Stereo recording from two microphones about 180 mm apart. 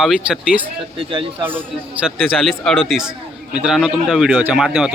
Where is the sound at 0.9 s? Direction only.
30° right (ahead or behind).